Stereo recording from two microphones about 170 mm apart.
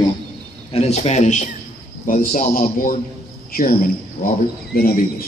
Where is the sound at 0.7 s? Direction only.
35° left (ahead or behind); by 5.2 s 60° left (ahead or behind).